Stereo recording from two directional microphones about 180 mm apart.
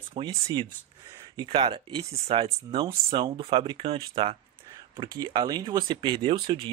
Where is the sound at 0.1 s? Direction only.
30° right (ahead or behind).